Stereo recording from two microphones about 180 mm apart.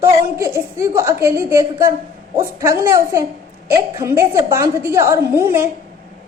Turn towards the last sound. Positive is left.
turn(degrees=-15)  # may be behind; listen again after turning